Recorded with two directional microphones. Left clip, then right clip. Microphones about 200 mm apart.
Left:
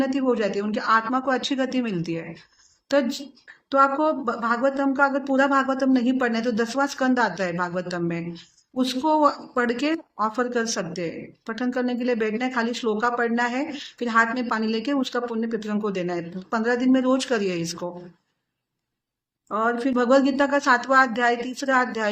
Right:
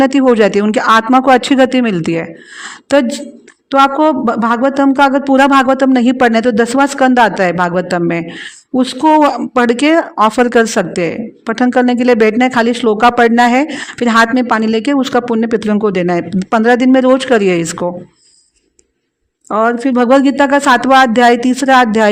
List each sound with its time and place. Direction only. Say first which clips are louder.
0.0 s speech: right 14 dB; 50° right (ahead or behind)
19.5 s speech: right 11 dB; 45° right (ahead or behind)